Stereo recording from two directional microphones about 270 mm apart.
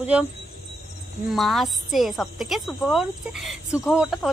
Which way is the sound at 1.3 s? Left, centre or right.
Centre.